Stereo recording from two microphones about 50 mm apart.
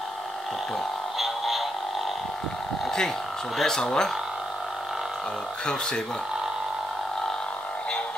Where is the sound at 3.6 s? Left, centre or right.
Centre.